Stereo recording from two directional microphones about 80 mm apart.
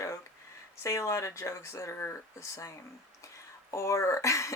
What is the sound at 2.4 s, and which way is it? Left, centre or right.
Speech, left.